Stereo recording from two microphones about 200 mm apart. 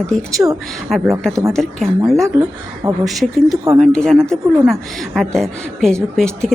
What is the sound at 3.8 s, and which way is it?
A woman's voice, 5° left (ahead or behind).